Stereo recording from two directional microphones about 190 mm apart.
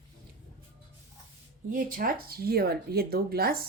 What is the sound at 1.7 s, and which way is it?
Speech, 45° right (ahead or behind).